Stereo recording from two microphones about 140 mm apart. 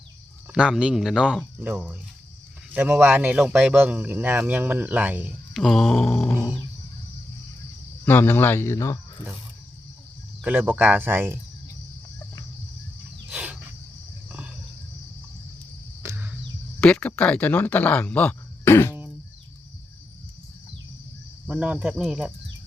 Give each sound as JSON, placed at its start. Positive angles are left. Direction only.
{"t": 0.5, "sound": "speech", "side_deg": -5}
{"t": 1.5, "sound": "a man's voice", "side_deg": -15}
{"t": 5.5, "sound": "speech", "side_deg": 0}
{"t": 8.0, "sound": "speech", "side_deg": 15}
{"t": 10.4, "sound": "a man's voice", "side_deg": -10}
{"t": 13.3, "sound": "cricket", "side_deg": -10}
{"t": 14.3, "sound": "a sound", "side_deg": -10}
{"t": 16.0, "sound": "a sound", "side_deg": -15}
{"t": 16.8, "sound": "speech", "side_deg": 10}
{"t": 21.4, "sound": "speech", "side_deg": -5}